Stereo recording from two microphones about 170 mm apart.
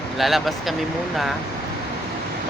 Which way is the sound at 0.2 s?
Centre (ahead or behind).